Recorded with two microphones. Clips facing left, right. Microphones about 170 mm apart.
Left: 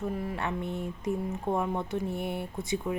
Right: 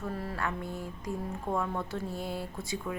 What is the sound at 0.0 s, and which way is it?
A woman's voice, 15° left (ahead or behind).